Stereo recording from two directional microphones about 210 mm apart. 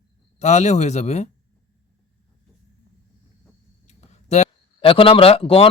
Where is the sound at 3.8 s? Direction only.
30° left (ahead or behind).